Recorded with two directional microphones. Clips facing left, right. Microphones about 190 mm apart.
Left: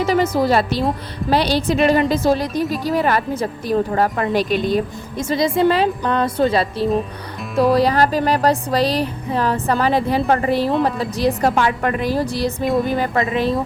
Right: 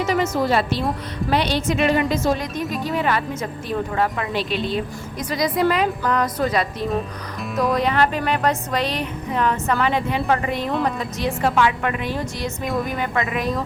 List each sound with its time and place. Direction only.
0.0 s a woman's voice: 35° left (ahead or behind)
5.3 s a woman's voice: 25° left (ahead or behind)